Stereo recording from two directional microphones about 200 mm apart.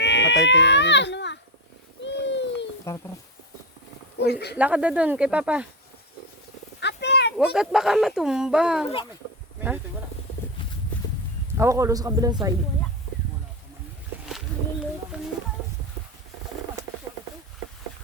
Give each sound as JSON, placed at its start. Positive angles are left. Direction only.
{"t": 0.0, "sound": "baby cry", "side_deg": 60}
{"t": 0.4, "sound": "a sound", "side_deg": 60}
{"t": 2.9, "sound": "speech", "side_deg": 15}
{"t": 4.3, "sound": "speech", "side_deg": 55}
{"t": 4.5, "sound": "speech", "side_deg": -5}
{"t": 6.7, "sound": "a sound", "side_deg": 60}
{"t": 7.3, "sound": "speech", "side_deg": -5}
{"t": 9.6, "sound": "insect", "side_deg": -10}
{"t": 11.5, "sound": "a man's voice", "side_deg": -15}
{"t": 15.1, "sound": "a sound", "side_deg": -5}